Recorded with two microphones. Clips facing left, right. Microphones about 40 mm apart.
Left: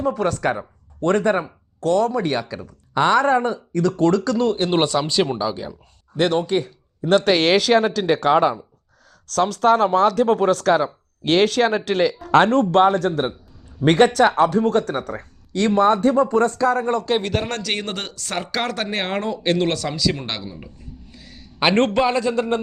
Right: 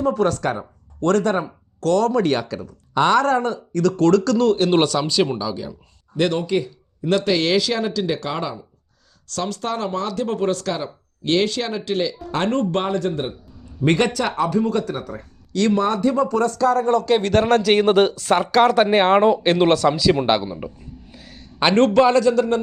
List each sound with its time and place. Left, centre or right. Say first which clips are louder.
0.0 s speech: right 1 dB; centre
1.0 s speech: even; left
5.5 s speech: left 1 dB; left
9.3 s speech: left 8 dB; left
15.5 s speech: left 2 dB; left
17.3 s speech: right 9 dB; centre
18.8 s speech: right 10 dB; centre
21.2 s a sound: right 1 dB; centre
21.9 s speech: right 4 dB; centre